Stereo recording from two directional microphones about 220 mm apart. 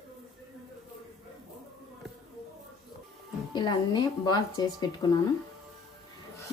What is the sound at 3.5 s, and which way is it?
A woman's voice, 20° left (ahead or behind).